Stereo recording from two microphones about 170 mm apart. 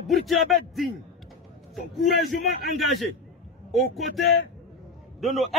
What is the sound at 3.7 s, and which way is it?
Speech, centre (ahead or behind).